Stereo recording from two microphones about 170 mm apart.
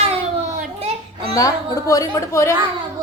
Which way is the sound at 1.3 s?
20° left (ahead or behind).